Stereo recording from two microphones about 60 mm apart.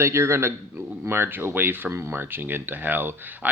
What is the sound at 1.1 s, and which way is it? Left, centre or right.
A man's voice, right.